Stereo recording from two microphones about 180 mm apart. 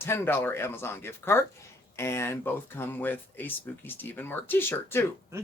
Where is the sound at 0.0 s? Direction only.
15° left (ahead or behind).